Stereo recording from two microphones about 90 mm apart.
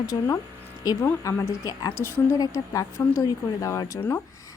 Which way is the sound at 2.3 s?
40° left (ahead or behind).